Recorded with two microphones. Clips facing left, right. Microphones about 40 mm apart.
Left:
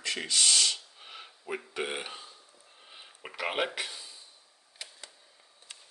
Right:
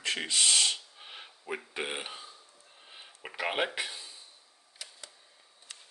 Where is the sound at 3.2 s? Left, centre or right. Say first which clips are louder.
Even; centre.